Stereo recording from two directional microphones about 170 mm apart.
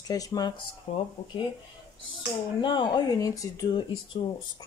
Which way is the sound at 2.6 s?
30° left (ahead or behind).